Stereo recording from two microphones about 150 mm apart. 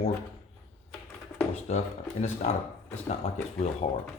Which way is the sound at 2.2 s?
45° left (ahead or behind).